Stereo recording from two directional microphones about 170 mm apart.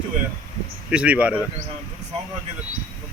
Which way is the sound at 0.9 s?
5° right (ahead or behind).